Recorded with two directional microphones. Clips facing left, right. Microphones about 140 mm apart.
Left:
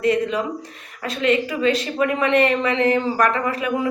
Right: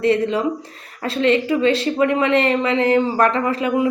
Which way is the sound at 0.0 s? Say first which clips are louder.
Right 3 dB; 30° right (ahead or behind).